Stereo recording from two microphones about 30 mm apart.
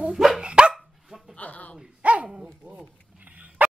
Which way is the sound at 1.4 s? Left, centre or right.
Left.